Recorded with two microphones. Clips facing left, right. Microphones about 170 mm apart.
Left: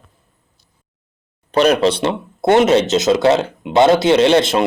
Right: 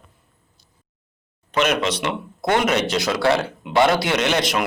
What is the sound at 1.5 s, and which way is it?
Speech, 35° left (ahead or behind).